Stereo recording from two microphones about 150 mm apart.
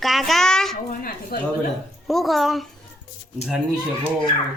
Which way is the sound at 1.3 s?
90° left.